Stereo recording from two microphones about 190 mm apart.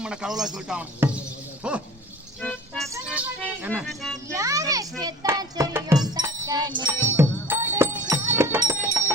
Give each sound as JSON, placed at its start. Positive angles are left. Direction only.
{"t": 0.0, "sound": "speech", "side_deg": -5}
{"t": 2.4, "sound": "music", "side_deg": 5}
{"t": 3.1, "sound": "music", "side_deg": -10}
{"t": 3.8, "sound": "speech", "side_deg": 0}
{"t": 4.4, "sound": "music", "side_deg": -15}
{"t": 7.2, "sound": "music", "side_deg": -10}